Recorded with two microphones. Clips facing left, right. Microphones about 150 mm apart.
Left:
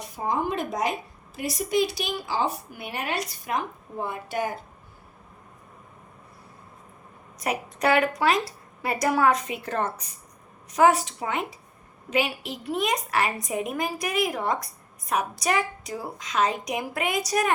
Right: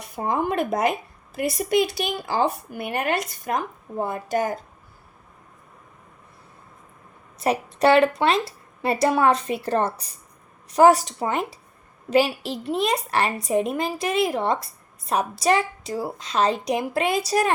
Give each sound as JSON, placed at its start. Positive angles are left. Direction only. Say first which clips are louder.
{"t": 0.0, "sound": "a woman's voice", "louder": "right 2 dB", "side_deg": -60}
{"t": 7.3, "sound": "a woman's voice", "louder": "right 6 dB", "side_deg": -30}